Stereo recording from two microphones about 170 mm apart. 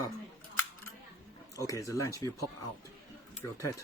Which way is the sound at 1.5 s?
20° left (ahead or behind).